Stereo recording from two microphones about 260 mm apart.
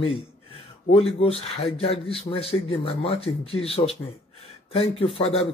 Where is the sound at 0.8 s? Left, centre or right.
Left.